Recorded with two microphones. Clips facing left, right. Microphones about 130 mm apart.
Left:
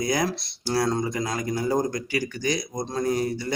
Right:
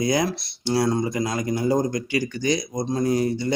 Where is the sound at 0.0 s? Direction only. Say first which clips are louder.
Right 3 dB; 25° right (ahead or behind).